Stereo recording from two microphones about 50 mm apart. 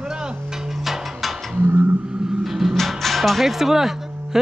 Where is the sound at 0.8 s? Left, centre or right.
Centre.